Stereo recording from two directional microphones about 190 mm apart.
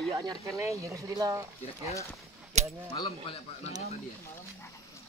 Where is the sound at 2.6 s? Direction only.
35° right (ahead or behind).